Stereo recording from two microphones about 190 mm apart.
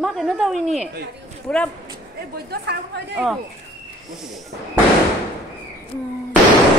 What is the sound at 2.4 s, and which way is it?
Speech, 60° right (ahead or behind).